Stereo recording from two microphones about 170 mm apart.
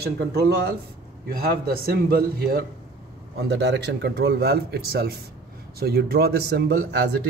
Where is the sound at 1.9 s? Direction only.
65° right (ahead or behind).